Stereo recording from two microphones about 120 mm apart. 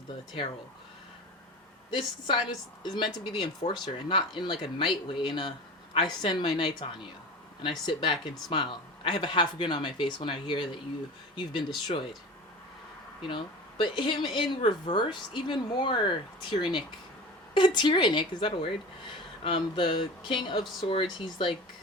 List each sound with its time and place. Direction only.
2.0 s speech: 45° left (ahead or behind)
13.2 s speech: 45° left (ahead or behind)